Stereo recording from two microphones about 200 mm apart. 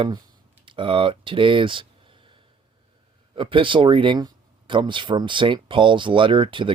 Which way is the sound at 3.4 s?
25° right (ahead or behind).